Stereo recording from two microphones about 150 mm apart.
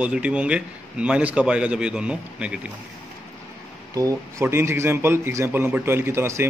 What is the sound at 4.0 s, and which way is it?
A man's voice, 20° right (ahead or behind).